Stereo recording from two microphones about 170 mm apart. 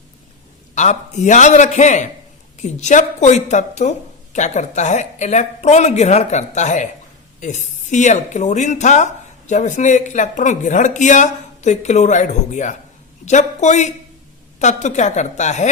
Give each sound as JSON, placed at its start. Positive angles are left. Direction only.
{"t": 0.8, "sound": "speech", "side_deg": 45}